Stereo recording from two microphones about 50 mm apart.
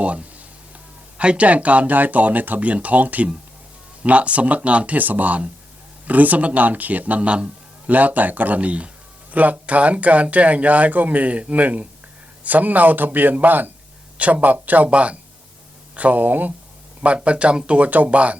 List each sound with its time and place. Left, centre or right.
0.0 s a sound: right
1.2 s speech: right
17.0 s speech: right